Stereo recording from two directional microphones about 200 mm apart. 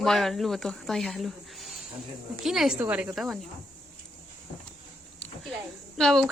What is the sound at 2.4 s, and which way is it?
Speech, centre (ahead or behind).